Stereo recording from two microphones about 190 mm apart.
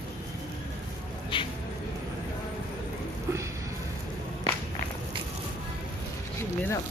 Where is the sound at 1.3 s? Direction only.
25° left (ahead or behind).